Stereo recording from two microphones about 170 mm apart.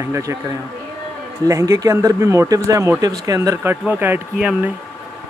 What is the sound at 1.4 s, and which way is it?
Speech, 20° right (ahead or behind).